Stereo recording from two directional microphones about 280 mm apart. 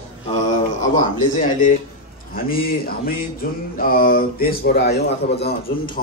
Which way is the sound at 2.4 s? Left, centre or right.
Left.